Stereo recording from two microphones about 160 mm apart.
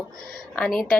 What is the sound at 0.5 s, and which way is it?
Speech, 5° left (ahead or behind).